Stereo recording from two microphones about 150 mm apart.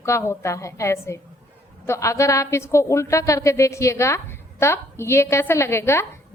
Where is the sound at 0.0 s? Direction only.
20° left (ahead or behind).